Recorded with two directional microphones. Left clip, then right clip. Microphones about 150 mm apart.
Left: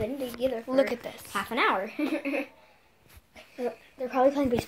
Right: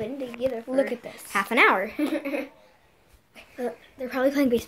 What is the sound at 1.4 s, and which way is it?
Speech, 40° right (ahead or behind).